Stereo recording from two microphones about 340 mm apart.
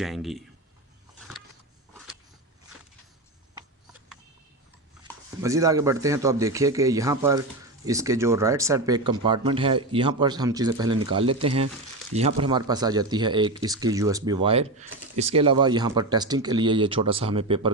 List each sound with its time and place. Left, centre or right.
0.0 s speech: centre
5.4 s a man's voice: centre